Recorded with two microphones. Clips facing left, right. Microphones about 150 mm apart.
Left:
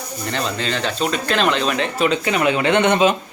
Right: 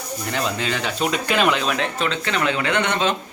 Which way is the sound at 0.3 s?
10° right (ahead or behind).